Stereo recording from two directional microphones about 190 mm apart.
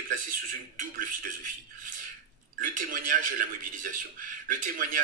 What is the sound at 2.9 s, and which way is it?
Speech, 45° right (ahead or behind).